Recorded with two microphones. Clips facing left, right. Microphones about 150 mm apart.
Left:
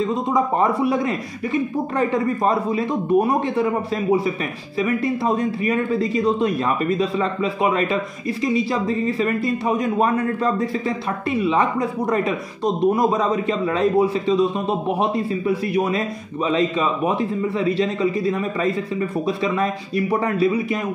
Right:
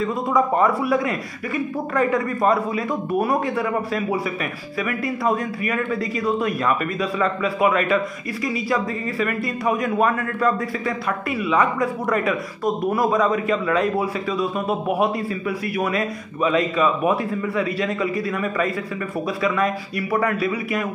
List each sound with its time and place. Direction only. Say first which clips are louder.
0.0 s a man's voice: even; 20° left (ahead or behind)